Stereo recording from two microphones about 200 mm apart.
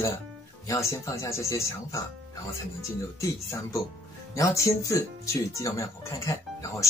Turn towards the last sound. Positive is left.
turn(degrees=15)  # may be behind; listen again after turning